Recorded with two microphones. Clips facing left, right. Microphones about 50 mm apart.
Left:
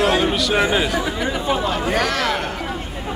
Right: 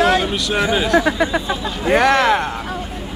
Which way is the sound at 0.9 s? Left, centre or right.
Right.